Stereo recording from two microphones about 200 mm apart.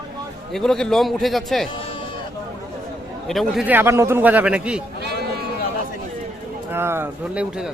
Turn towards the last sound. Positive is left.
turn(degrees=-5)  # may be behind; listen again after turning